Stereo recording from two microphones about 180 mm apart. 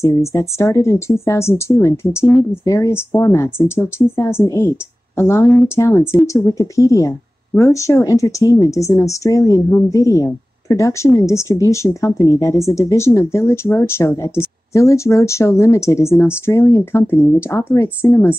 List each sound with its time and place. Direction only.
0.0 s speech: 15° left (ahead or behind)